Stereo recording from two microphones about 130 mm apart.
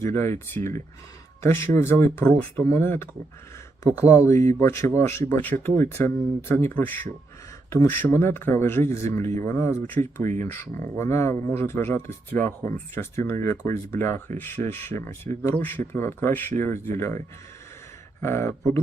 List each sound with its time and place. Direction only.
0.0 s speech: 20° left (ahead or behind)
4.3 s speech: 20° left (ahead or behind)
18.2 s speech: 20° left (ahead or behind)